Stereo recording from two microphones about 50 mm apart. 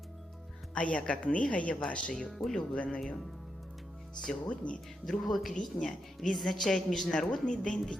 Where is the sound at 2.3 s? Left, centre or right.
Centre.